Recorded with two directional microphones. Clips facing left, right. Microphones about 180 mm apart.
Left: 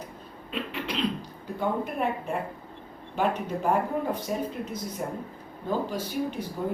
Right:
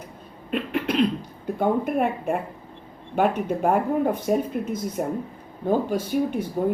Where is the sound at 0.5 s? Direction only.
55° right (ahead or behind).